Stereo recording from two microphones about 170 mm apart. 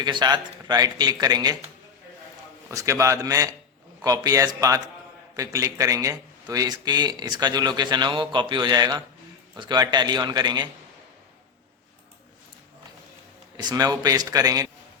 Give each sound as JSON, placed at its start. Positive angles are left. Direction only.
{"t": 0.0, "sound": "a man's voice", "side_deg": -25}
{"t": 2.6, "sound": "a man's voice", "side_deg": -15}
{"t": 13.6, "sound": "a man's voice", "side_deg": -25}